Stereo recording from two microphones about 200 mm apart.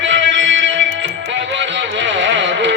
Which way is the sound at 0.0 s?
65° right (ahead or behind).